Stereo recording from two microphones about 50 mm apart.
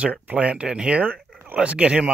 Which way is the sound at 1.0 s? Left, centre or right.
Right.